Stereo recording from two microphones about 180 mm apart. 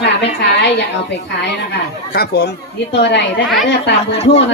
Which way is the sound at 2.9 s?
75° left (ahead or behind).